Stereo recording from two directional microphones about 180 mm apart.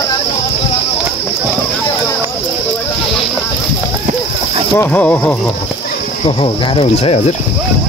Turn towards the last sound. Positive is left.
turn(degrees=35)  # may be behind; listen again after turning